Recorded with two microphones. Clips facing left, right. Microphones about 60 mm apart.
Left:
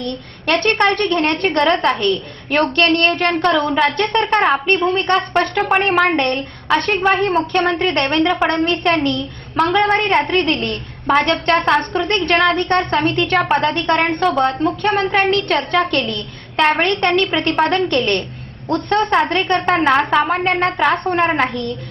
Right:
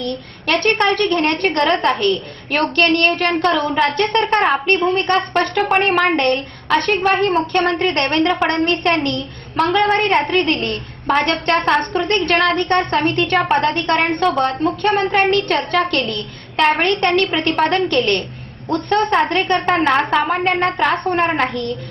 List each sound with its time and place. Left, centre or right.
0.9 s a woman's voice: left
1.5 s a woman's voice: centre
7.0 s a woman's voice: centre
7.3 s a woman's voice: centre